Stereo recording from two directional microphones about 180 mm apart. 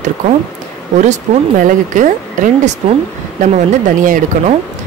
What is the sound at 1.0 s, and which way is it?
Speech, 45° right (ahead or behind).